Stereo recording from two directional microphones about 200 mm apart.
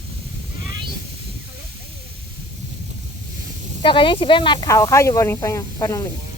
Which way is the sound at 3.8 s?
25° left (ahead or behind).